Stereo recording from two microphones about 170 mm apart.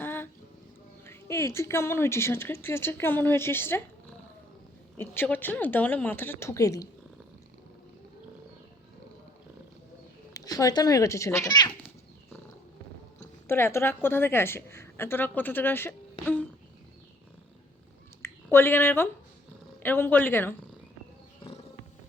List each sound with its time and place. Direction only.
0.0 s music: 15° left (ahead or behind)
1.0 s a woman's voice: 15° left (ahead or behind)
4.9 s a woman's voice: 10° left (ahead or behind)
10.3 s a child's voice: 20° left (ahead or behind)
13.5 s a woman's voice: 15° left (ahead or behind)
18.2 s a sound: 15° left (ahead or behind)
19.8 s a woman's voice: 10° left (ahead or behind)